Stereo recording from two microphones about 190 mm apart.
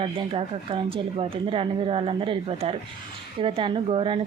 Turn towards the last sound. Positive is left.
turn(degrees=-30)  # may be behind; listen again after turning